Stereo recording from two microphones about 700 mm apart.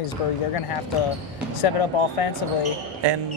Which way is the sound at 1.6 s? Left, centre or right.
Left.